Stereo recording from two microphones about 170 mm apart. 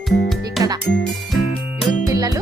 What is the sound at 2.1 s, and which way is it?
Speech, 20° right (ahead or behind).